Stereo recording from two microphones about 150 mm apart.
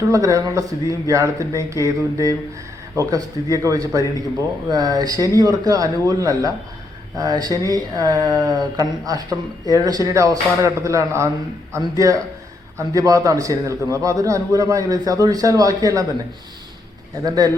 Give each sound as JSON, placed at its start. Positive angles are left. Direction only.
{"t": 0.1, "sound": "a man's voice", "side_deg": -20}
{"t": 17.2, "sound": "a man's voice", "side_deg": -25}